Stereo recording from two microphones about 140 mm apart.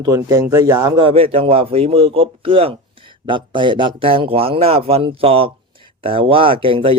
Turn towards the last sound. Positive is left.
turn(degrees=-40)  # may be behind; listen again after turning